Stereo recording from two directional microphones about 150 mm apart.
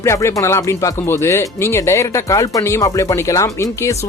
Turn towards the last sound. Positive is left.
turn(degrees=20)  # may be behind; listen again after turning